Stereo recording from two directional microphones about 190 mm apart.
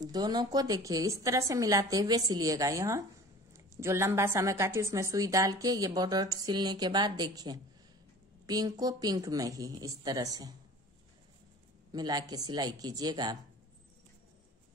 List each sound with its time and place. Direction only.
0.0 s a woman's voice: 20° right (ahead or behind)
11.9 s a woman's voice: 20° right (ahead or behind)